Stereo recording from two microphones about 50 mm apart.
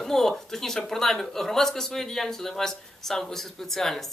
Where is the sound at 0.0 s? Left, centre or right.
Centre.